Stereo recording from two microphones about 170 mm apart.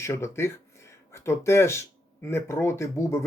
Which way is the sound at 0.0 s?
15° left (ahead or behind).